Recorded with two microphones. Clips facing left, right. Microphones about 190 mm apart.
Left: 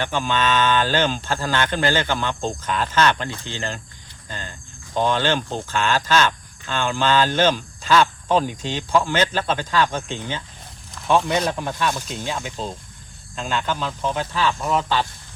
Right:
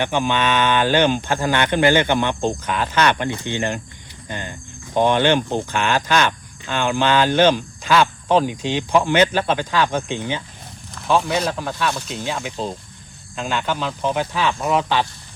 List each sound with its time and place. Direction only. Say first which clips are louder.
0.0 s speech: right 3 dB; 15° right (ahead or behind)
10.9 s a sound: even; centre (ahead or behind)
11.2 s speech: even; 5° right (ahead or behind)